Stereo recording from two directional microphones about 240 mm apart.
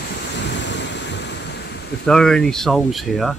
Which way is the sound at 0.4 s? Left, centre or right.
Left.